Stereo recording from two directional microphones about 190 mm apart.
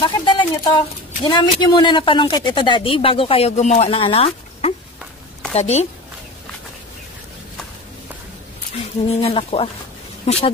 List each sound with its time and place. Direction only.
0.0 s speech: 25° left (ahead or behind)
8.7 s speech: 30° left (ahead or behind)